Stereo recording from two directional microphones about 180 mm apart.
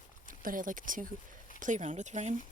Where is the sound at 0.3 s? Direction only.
50° right (ahead or behind).